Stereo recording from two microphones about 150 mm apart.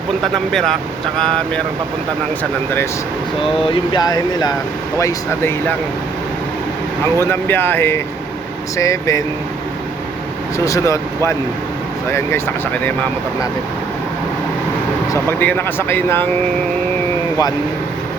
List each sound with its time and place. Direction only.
0.2 s speech: 5° left (ahead or behind)
3.6 s speech: 35° left (ahead or behind); by 5.7 s 15° left (ahead or behind)
7.2 s speech: 15° left (ahead or behind)
10.6 s speech: 20° left (ahead or behind)
12.1 s speech: 15° left (ahead or behind)
15.1 s speech: 15° left (ahead or behind)